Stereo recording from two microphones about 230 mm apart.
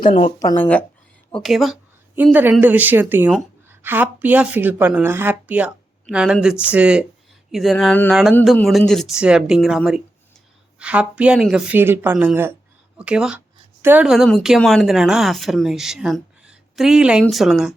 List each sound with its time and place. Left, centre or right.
0.0 s speech: left
0.3 s a woman's voice: centre